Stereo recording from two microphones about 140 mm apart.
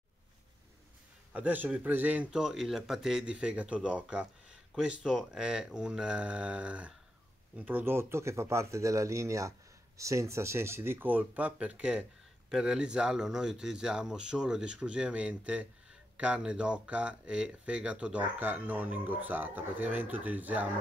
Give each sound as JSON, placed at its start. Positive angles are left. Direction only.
{"t": 1.3, "sound": "speech", "side_deg": -10}